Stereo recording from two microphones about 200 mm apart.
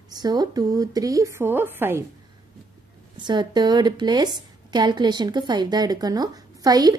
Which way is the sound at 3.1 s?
20° right (ahead or behind).